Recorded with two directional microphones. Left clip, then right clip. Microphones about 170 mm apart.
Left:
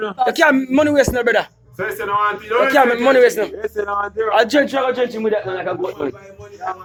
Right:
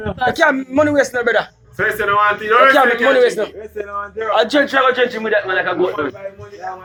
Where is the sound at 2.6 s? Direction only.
45° left (ahead or behind).